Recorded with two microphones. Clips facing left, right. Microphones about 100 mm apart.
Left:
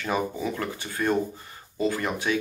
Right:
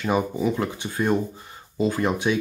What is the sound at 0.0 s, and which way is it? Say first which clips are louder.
Speech: right 4 dB; 15° right (ahead or behind).